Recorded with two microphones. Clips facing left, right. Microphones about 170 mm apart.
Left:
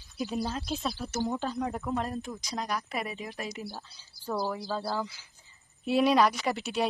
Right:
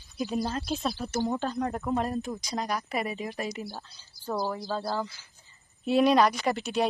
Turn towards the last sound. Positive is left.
turn(degrees=5)  # may be behind; listen again after turning